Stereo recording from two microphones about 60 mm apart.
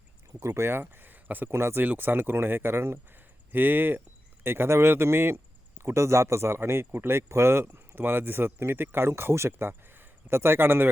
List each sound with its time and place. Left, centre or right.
0.3 s speech: right
1.5 s speech: right
1.8 s speech: right